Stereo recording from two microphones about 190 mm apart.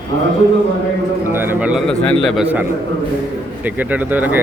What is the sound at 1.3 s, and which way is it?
A man's voice, 10° right (ahead or behind).